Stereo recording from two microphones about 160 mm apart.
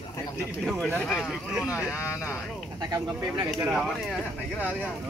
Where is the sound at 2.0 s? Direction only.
15° left (ahead or behind).